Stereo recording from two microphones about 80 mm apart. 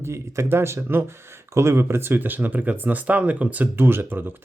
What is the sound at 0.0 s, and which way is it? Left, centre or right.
Speech, right.